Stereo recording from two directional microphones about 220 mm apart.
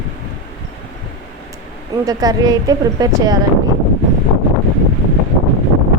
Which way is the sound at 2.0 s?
15° right (ahead or behind).